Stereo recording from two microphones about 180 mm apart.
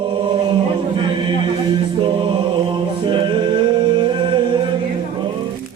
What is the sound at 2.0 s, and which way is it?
Music, 25° right (ahead or behind).